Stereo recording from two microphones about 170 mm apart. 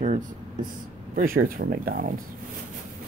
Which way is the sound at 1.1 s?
55° right (ahead or behind).